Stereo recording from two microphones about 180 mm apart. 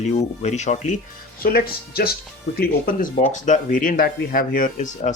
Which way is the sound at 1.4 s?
55° left (ahead or behind).